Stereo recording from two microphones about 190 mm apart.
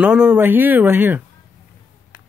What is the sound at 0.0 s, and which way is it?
Speech, 5° right (ahead or behind).